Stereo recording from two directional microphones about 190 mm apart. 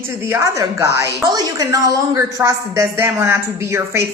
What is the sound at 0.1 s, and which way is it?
A woman's voice, 10° right (ahead or behind).